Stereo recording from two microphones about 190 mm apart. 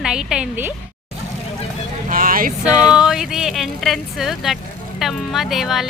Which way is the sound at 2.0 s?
45° right (ahead or behind).